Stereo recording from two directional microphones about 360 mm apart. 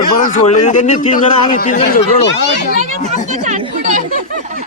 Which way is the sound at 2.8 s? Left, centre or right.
Centre.